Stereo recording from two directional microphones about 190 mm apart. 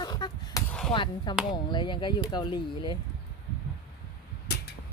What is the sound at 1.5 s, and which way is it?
Speech, 25° left (ahead or behind).